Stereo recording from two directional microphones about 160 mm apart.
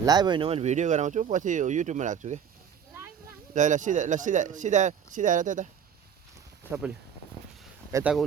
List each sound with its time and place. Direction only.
0.0 s speech: 25° right (ahead or behind); by 2.4 s 45° right (ahead or behind)
3.5 s speech: 50° right (ahead or behind)
6.7 s speech: 15° right (ahead or behind)
7.9 s speech: 20° right (ahead or behind)